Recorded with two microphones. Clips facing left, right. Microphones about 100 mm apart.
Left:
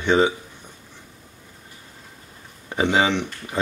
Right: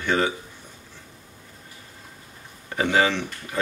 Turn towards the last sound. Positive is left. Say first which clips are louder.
# left 1 dB
turn(degrees=20)  # may be behind; listen again after turning